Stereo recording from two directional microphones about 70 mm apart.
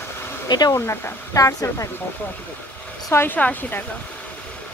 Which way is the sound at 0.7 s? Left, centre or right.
Left.